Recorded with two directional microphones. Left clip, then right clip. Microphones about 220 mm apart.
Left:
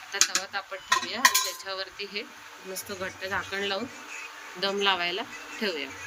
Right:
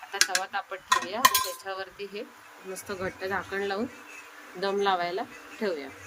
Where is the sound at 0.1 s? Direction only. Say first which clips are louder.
Even; 40° right (ahead or behind).